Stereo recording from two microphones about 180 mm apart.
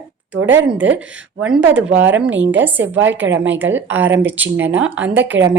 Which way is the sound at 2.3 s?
90° right.